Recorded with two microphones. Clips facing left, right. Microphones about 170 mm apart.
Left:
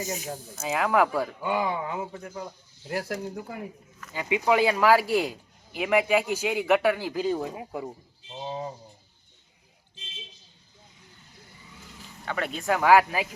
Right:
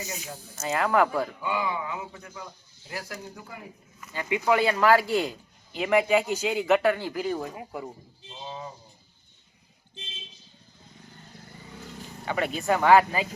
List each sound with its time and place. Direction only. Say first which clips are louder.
0.0 s speech: left 5 dB; 45° left (ahead or behind)
0.5 s speech: even; 10° left (ahead or behind)
1.5 s a man's voice: left 2 dB; 45° left (ahead or behind)
3.1 s speech: left 7 dB; 50° left (ahead or behind)
4.1 s speech: left 1 dB; 15° left (ahead or behind)
8.4 s a man's voice: left 5 dB; 40° left (ahead or behind)
12.2 s speech: right 2 dB; 5° right (ahead or behind)